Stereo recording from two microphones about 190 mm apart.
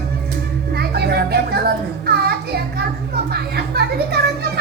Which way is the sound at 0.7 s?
55° right (ahead or behind).